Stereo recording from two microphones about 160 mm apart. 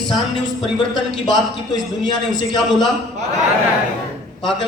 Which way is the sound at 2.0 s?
25° left (ahead or behind).